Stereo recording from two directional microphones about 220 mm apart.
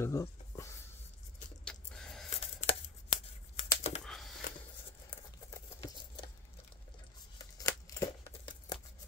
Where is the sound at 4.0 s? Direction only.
Centre (ahead or behind).